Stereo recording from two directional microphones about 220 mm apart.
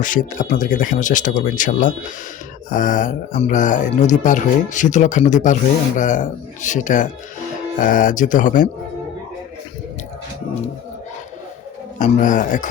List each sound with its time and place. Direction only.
0.0 s speech: 35° left (ahead or behind)
11.9 s speech: 35° left (ahead or behind)